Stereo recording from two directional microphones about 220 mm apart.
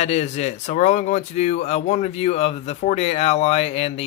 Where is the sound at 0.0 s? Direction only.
30° left (ahead or behind).